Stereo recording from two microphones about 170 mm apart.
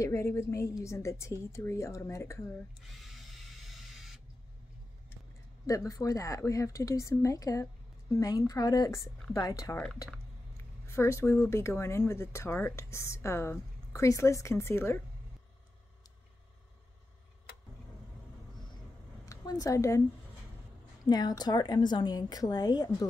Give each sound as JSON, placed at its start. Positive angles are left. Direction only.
{"t": 0.0, "sound": "speech", "side_deg": 15}
{"t": 3.0, "sound": "printer", "side_deg": 0}
{"t": 5.7, "sound": "a woman's voice", "side_deg": 20}
{"t": 19.2, "sound": "a sound", "side_deg": 20}
{"t": 21.0, "sound": "a woman's voice", "side_deg": 25}